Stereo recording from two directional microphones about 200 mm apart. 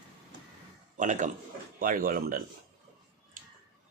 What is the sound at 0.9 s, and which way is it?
A man's voice, 40° right (ahead or behind).